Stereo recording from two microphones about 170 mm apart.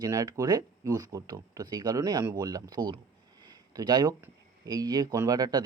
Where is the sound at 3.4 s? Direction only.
20° right (ahead or behind).